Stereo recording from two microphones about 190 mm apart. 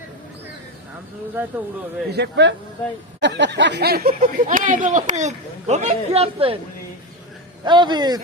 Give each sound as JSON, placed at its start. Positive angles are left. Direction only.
{"t": 2.1, "sound": "speech", "side_deg": -65}
{"t": 7.6, "sound": "a man's voice", "side_deg": -25}